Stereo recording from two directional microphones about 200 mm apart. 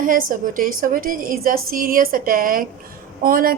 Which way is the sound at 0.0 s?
45° right (ahead or behind).